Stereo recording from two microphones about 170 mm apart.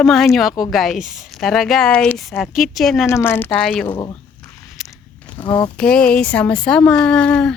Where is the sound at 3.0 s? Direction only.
15° left (ahead or behind).